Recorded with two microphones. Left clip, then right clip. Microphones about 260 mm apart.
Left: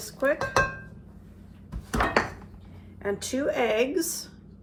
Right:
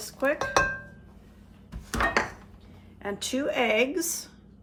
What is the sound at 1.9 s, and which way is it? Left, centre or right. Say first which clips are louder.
Dishes: left 1 dB; centre.